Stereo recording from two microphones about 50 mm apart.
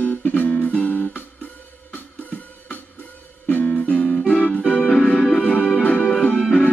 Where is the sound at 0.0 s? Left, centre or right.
Left.